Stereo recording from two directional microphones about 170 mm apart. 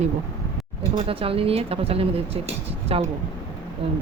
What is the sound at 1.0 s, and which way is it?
Speech, 35° right (ahead or behind).